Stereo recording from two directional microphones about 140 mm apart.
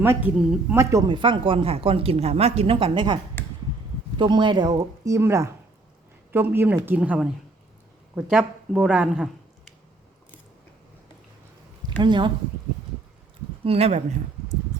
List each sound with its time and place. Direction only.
0.0 s speech: 15° right (ahead or behind)
0.3 s speech: 5° right (ahead or behind)
0.8 s speech: 20° right (ahead or behind)
1.0 s speech: 35° right (ahead or behind)
4.2 s speech: 35° right (ahead or behind); by 9.7 s centre (ahead or behind)
11.9 s speech: 35° right (ahead or behind)
13.7 s speech: 45° right (ahead or behind)